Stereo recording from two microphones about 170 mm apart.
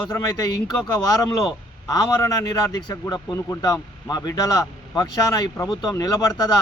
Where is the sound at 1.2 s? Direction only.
20° left (ahead or behind).